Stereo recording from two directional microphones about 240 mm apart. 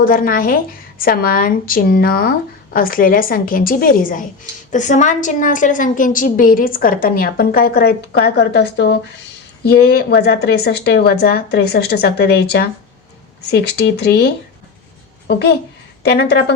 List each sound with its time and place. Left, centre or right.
0.0 s a woman's voice: left
15.3 s speech: left